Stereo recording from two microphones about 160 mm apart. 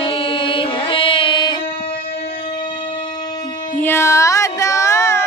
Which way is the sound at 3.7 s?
15° left (ahead or behind).